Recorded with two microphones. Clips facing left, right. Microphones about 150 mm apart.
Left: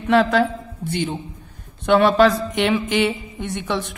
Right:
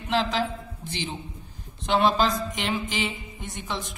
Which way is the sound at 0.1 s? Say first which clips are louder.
Left 9 dB; 55° left (ahead or behind).